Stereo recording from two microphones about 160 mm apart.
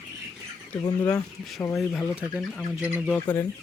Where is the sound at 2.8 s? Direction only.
10° right (ahead or behind).